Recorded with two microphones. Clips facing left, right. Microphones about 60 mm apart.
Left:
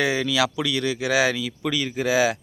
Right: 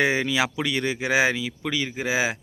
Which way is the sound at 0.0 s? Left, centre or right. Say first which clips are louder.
Even; right.